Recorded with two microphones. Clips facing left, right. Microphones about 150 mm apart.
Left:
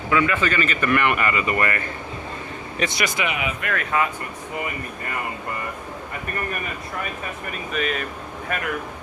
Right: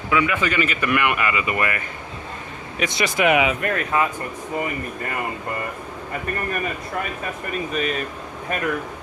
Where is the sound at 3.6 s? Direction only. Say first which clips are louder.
Right 2 dB; 30° right (ahead or behind).